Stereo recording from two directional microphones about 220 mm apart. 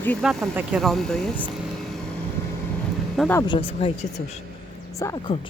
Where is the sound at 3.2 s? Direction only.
10° left (ahead or behind).